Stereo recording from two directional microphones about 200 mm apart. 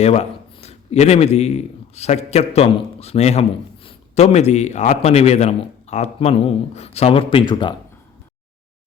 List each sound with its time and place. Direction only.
0.0 s a man's voice: 30° left (ahead or behind)